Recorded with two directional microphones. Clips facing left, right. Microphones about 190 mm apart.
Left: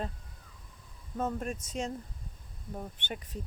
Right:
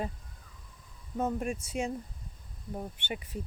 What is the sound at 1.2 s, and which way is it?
Speech, 10° right (ahead or behind).